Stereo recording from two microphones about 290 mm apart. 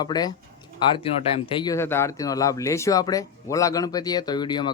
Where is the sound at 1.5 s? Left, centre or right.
Centre.